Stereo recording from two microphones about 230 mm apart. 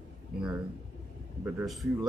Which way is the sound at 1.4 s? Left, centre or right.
Centre.